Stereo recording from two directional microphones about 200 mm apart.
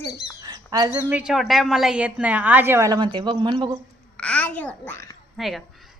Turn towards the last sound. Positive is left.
turn(degrees=0)  # may be behind; listen again after turning